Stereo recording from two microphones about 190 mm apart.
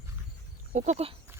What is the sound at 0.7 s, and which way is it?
Speech, 40° right (ahead or behind).